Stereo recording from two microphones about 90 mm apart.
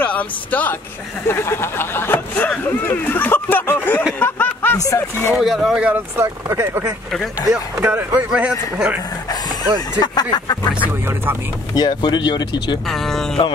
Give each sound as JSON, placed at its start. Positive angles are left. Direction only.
{"t": 0.0, "sound": "speech", "side_deg": 20}
{"t": 4.2, "sound": "a sound", "side_deg": 20}
{"t": 4.7, "sound": "speech", "side_deg": 35}
{"t": 5.4, "sound": "speech", "side_deg": -5}
{"t": 5.9, "sound": "speech", "side_deg": -25}
{"t": 8.3, "sound": "a man's voice", "side_deg": -10}
{"t": 9.9, "sound": "speech", "side_deg": 50}
{"t": 12.9, "sound": "speech", "side_deg": 5}